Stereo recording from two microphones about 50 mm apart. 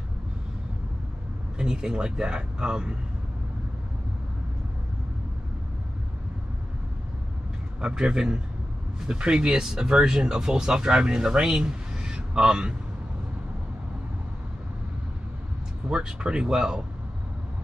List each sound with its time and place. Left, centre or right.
1.6 s speech: centre
7.8 s speech: centre
15.9 s speech: centre